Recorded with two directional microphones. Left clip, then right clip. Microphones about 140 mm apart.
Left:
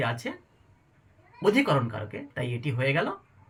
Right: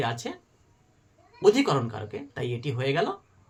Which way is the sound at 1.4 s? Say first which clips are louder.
Right 2 dB; 25° right (ahead or behind).